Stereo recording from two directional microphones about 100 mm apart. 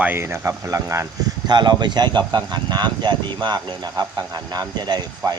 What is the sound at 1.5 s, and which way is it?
Speech, 45° right (ahead or behind).